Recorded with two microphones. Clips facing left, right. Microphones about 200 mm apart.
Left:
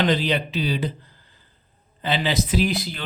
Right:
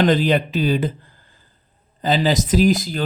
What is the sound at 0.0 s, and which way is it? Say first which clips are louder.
A man's voice: right 5 dB; 50° right (ahead or behind).